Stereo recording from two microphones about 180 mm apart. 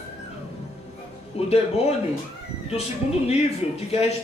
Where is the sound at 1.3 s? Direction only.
35° left (ahead or behind).